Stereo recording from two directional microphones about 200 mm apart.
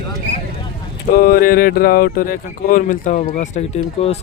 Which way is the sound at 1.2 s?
50° left (ahead or behind).